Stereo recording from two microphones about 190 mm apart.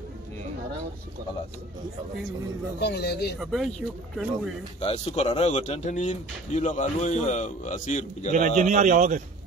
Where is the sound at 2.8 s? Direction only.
60° left (ahead or behind).